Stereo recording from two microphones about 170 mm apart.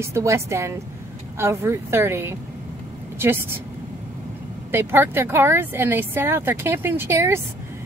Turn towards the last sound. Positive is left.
turn(degrees=-15)  # may be behind; listen again after turning